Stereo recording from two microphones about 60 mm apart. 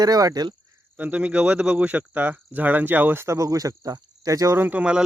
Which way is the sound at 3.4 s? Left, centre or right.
Right.